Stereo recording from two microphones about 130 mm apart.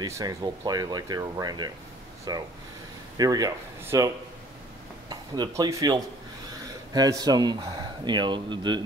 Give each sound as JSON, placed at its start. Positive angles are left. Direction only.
{"t": 0.0, "sound": "speech", "side_deg": -25}
{"t": 5.1, "sound": "speech", "side_deg": -35}